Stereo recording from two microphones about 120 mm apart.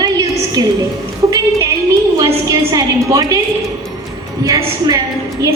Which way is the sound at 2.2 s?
30° right (ahead or behind).